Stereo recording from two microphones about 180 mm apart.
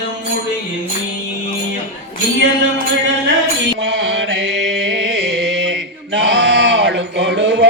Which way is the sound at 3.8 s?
80° right.